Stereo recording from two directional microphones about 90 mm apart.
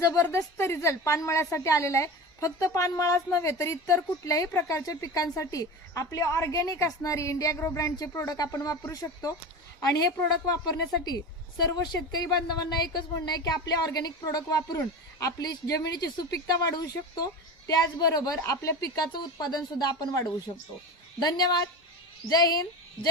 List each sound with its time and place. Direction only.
0.0 s a woman's voice: 40° left (ahead or behind)
10.5 s a woman's voice: 50° left (ahead or behind)